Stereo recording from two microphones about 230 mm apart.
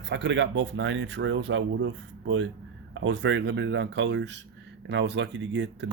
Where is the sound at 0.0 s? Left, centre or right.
Right.